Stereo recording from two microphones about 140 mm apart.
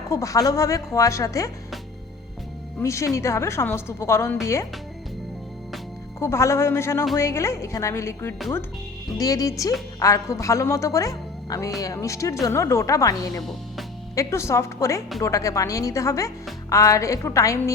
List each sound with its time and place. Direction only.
0.1 s a woman's voice: 25° left (ahead or behind)
2.8 s a woman's voice: 20° left (ahead or behind)
6.1 s a woman's voice: 20° left (ahead or behind)
13.4 s speech: centre (ahead or behind)
14.2 s a woman's voice: 20° left (ahead or behind)